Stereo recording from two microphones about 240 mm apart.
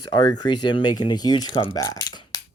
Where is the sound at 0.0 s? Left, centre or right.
Centre.